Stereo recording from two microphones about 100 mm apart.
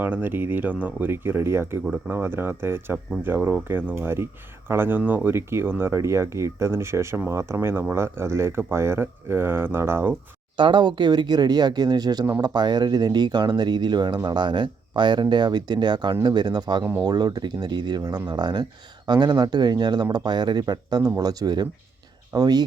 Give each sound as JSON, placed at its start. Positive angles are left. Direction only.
{"t": 0.0, "sound": "speech", "side_deg": -20}
{"t": 10.6, "sound": "speech", "side_deg": -50}